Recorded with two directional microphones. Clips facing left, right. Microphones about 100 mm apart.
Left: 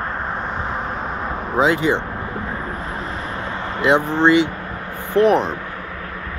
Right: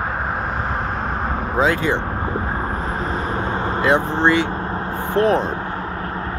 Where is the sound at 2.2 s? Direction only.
35° right (ahead or behind).